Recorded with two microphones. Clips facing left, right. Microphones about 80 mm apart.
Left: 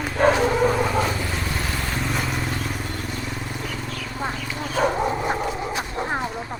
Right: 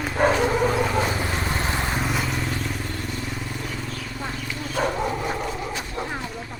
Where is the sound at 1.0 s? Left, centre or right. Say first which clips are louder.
Right 1 dB; centre.